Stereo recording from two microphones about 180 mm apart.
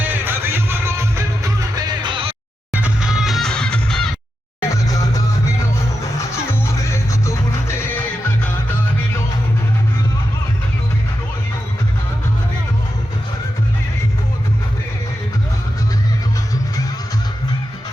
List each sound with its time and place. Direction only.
0.0 s music: 10° right (ahead or behind); by 2.3 s 25° right (ahead or behind)
2.7 s music: 5° right (ahead or behind)
4.9 s music: 20° left (ahead or behind)
6.3 s music: 15° left (ahead or behind)